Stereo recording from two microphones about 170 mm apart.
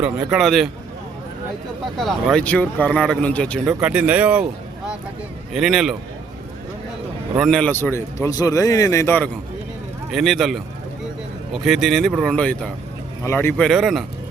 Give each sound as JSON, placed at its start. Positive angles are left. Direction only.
{"t": 0.0, "sound": "speech", "side_deg": -5}
{"t": 2.0, "sound": "a man's voice", "side_deg": 0}
{"t": 3.7, "sound": "speech", "side_deg": -10}
{"t": 5.5, "sound": "speech", "side_deg": 0}
{"t": 7.3, "sound": "a man's voice", "side_deg": 0}
{"t": 10.1, "sound": "a man's voice", "side_deg": 0}
{"t": 13.7, "sound": "speech", "side_deg": 0}